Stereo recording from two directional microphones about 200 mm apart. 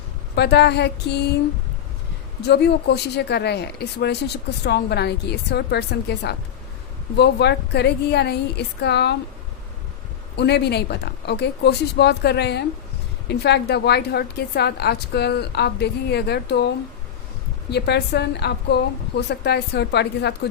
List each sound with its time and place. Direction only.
0.3 s speech: 55° left (ahead or behind)
2.5 s speech: 55° left (ahead or behind)
10.3 s speech: 55° left (ahead or behind)